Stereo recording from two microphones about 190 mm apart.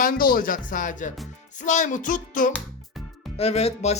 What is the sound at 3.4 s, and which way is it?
Speech, 30° left (ahead or behind).